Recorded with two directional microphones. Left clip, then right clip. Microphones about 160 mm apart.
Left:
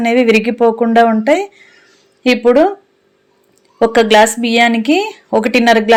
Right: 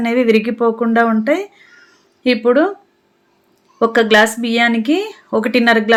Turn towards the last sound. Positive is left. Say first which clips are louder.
# left 3 dB
turn(degrees=15)  # may be behind; listen again after turning